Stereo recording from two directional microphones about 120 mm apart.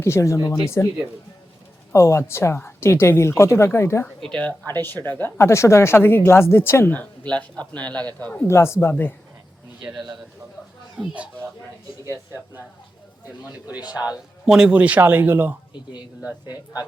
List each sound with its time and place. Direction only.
0.0 s speech: 25° left (ahead or behind)
1.9 s speech: 25° left (ahead or behind)
4.2 s speech: 10° left (ahead or behind)
8.4 s speech: 20° left (ahead or behind)
10.9 s speech: 10° right (ahead or behind)
12.0 s speech: 25° right (ahead or behind)
14.4 s speech: 5° right (ahead or behind)